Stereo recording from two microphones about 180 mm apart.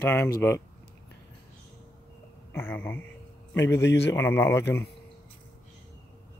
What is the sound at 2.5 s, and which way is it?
Speech, 10° left (ahead or behind).